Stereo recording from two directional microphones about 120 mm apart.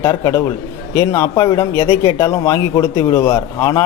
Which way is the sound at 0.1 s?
30° left (ahead or behind).